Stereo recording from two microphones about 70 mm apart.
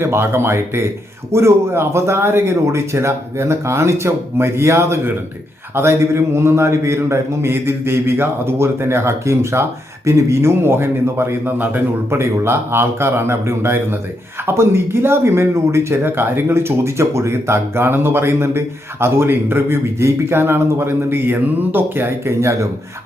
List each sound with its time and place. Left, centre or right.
0.0 s speech: right
12.1 s speech: right